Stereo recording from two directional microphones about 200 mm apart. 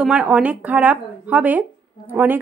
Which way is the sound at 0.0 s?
5° right (ahead or behind).